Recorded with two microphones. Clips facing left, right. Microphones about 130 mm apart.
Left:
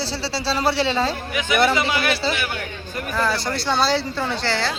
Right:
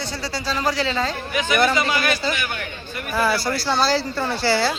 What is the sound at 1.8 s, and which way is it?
Speech, 25° left (ahead or behind).